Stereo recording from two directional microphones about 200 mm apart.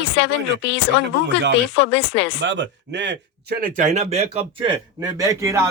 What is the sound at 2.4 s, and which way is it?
Speech, 65° right (ahead or behind).